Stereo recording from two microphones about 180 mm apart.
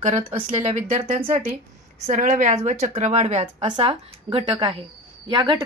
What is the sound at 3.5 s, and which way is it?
A woman's voice, 25° right (ahead or behind).